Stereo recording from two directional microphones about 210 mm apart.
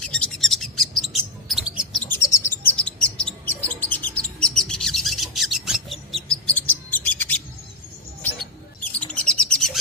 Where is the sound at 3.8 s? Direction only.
10° left (ahead or behind).